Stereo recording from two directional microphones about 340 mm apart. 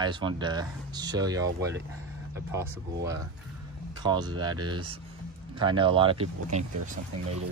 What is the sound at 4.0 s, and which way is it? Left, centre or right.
Speech, centre.